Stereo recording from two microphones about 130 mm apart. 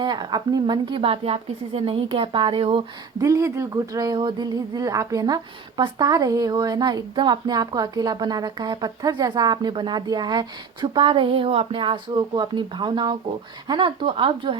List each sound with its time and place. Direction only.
0.0 s a woman's voice: 35° right (ahead or behind)
3.2 s speech: 25° right (ahead or behind); by 14.6 s 40° right (ahead or behind)